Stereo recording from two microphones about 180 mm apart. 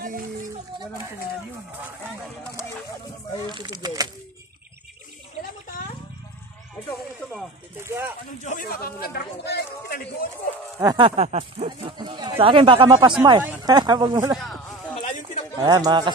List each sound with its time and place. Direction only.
3.4 s speech: 25° right (ahead or behind)
7.8 s speech: 15° right (ahead or behind)
8.5 s speech: 50° left (ahead or behind)
10.8 s speech: 20° right (ahead or behind)
11.1 s speech: 35° right (ahead or behind)
14.4 s a sound: centre (ahead or behind)
15.0 s a sound: 45° left (ahead or behind)
15.6 s speech: 20° right (ahead or behind)